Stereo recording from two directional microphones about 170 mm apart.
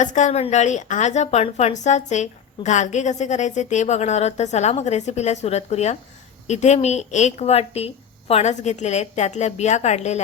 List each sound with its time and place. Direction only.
0.0 s a woman's voice: 45° left (ahead or behind)